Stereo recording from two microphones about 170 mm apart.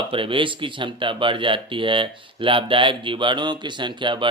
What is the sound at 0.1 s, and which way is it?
A man's voice, 30° right (ahead or behind).